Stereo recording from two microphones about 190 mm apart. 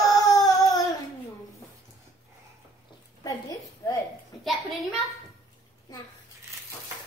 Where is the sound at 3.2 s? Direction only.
20° left (ahead or behind).